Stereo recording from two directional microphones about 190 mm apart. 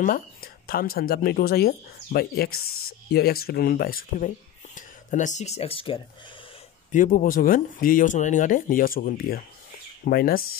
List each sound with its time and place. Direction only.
0.0 s speech: 50° left (ahead or behind)
4.7 s speech: 40° left (ahead or behind)
6.9 s speech: 45° left (ahead or behind)